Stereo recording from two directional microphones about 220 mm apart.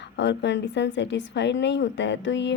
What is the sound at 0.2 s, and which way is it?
Speech, 55° left (ahead or behind).